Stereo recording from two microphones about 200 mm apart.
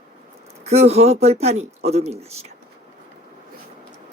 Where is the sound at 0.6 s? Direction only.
30° right (ahead or behind).